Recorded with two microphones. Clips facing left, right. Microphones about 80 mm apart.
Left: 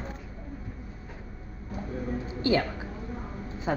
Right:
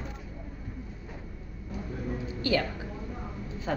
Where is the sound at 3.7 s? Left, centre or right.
Left.